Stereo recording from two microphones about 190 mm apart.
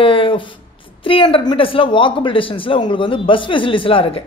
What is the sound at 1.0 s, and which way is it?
Speech, 30° left (ahead or behind).